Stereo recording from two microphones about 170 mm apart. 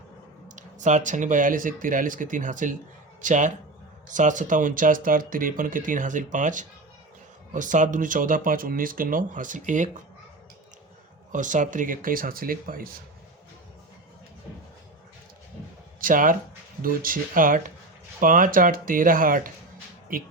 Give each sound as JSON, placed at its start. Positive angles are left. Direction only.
{"t": 0.4, "sound": "speech", "side_deg": -45}
{"t": 11.3, "sound": "speech", "side_deg": -50}
{"t": 16.0, "sound": "speech", "side_deg": -55}